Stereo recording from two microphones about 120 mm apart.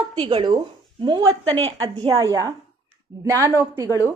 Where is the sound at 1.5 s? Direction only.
55° right (ahead or behind).